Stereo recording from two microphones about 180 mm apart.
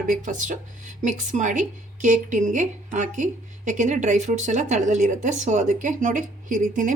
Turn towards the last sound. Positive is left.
turn(degrees=-45)  # may be behind; listen again after turning